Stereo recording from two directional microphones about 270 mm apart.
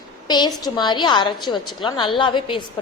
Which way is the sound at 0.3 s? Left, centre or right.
Centre.